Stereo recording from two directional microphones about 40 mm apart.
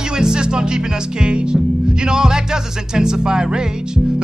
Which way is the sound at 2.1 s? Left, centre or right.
Centre.